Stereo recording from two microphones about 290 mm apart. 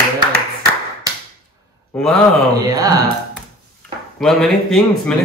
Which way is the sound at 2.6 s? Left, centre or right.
Centre.